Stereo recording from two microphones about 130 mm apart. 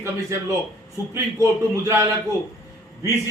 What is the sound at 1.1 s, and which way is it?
A man's voice, 20° right (ahead or behind).